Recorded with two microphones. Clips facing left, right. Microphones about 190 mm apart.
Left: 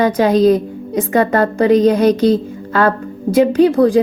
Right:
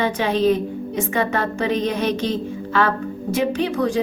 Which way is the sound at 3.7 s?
35° left (ahead or behind).